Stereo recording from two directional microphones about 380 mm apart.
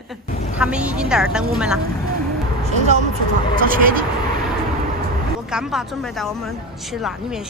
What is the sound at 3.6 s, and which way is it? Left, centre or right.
Speech, right.